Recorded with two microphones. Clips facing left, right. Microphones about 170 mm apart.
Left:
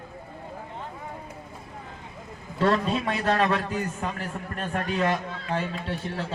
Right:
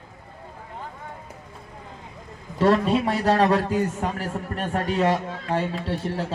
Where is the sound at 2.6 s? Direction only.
25° right (ahead or behind).